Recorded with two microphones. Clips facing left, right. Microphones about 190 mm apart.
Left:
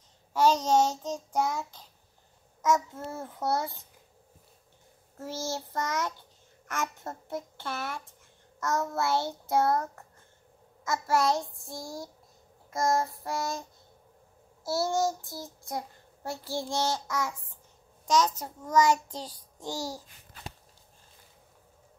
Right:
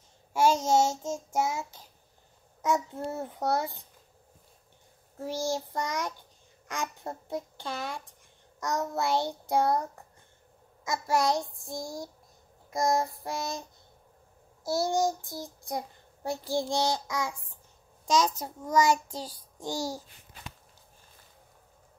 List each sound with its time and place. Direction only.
0.3 s child singing: 10° right (ahead or behind)
2.9 s child singing: 20° right (ahead or behind)
5.2 s child singing: 15° right (ahead or behind)